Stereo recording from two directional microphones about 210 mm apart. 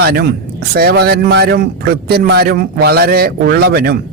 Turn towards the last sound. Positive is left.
turn(degrees=-50)  # may be behind; listen again after turning